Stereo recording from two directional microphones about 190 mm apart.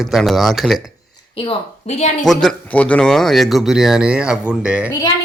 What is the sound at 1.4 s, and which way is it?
Speech, 30° left (ahead or behind).